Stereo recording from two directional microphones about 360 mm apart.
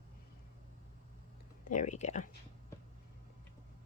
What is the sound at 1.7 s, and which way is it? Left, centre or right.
Speech, left.